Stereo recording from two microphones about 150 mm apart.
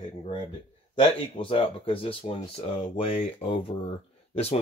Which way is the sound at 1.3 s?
35° left (ahead or behind).